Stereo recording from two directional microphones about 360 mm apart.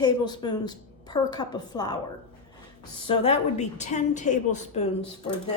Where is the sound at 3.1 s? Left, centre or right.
Centre.